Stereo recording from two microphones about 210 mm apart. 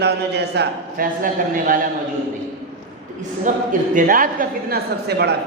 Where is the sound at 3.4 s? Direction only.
40° right (ahead or behind).